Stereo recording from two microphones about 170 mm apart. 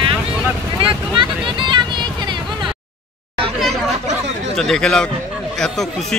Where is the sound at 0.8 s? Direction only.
30° right (ahead or behind).